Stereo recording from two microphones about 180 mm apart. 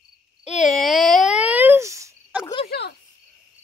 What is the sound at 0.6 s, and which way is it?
A child's voice, centre (ahead or behind).